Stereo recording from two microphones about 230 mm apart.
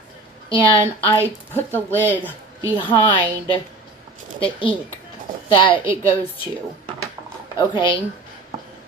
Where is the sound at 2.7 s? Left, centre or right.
Left.